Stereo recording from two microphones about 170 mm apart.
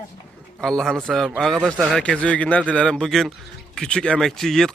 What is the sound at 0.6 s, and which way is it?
A man's voice, centre (ahead or behind).